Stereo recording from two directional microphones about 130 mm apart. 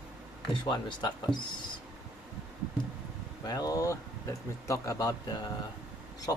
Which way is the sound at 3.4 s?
30° left (ahead or behind).